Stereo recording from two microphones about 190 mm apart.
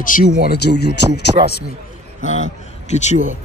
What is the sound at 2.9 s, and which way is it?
Speech, 40° left (ahead or behind).